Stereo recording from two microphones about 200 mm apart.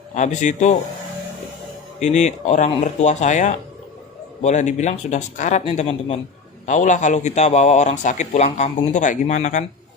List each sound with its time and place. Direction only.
0.1 s a man's voice: 35° left (ahead or behind)
2.0 s a man's voice: 35° left (ahead or behind)